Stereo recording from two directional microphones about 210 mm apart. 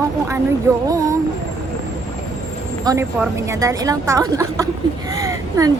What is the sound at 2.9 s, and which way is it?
A woman's voice, 20° right (ahead or behind).